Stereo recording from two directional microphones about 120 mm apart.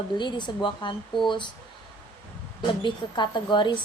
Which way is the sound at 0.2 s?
40° left (ahead or behind).